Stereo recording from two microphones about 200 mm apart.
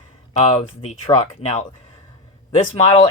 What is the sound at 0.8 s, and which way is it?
Speech, 35° left (ahead or behind).